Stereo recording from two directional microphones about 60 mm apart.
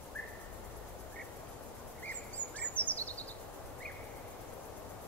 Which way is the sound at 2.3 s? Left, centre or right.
Left.